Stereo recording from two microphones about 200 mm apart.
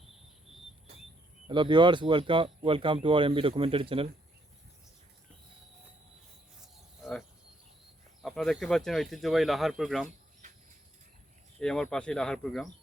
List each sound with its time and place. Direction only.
0.0 s a sound: centre (ahead or behind)
1.5 s speech: 25° right (ahead or behind)
7.0 s cricket: centre (ahead or behind)
8.2 s speech: centre (ahead or behind)
11.6 s speech: 5° left (ahead or behind)